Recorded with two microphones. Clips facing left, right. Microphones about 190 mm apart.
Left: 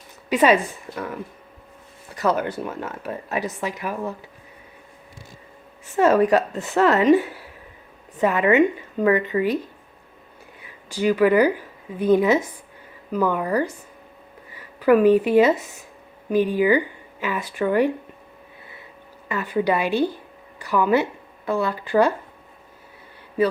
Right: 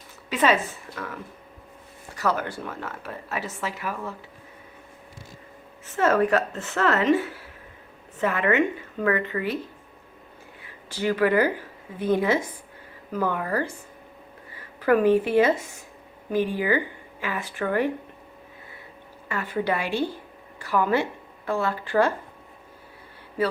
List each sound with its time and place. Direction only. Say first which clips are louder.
0.3 s speech: left 5 dB; 15° left (ahead or behind)
5.8 s a woman's voice: left 4 dB; 15° left (ahead or behind)
10.6 s a woman's voice: left 5 dB; 15° left (ahead or behind)
19.3 s speech: left 4 dB; 15° left (ahead or behind)